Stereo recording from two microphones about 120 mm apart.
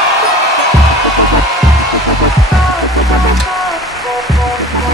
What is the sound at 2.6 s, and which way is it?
Rain on surface, centre (ahead or behind).